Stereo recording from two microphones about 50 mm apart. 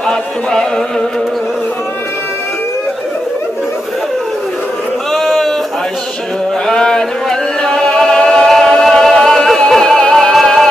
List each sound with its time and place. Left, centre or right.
0.1 s music: centre
5.1 s a sound: centre
6.7 s chant: centre
8.8 s music: centre